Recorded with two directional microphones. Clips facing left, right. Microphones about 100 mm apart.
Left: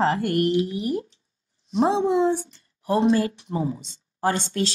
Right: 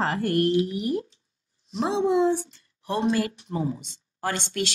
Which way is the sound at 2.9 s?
30° left (ahead or behind).